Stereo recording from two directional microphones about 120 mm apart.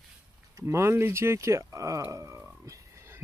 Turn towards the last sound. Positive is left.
turn(degrees=-25)  # may be behind; listen again after turning